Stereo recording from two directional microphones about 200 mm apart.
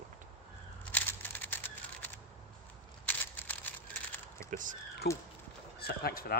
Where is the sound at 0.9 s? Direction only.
10° left (ahead or behind).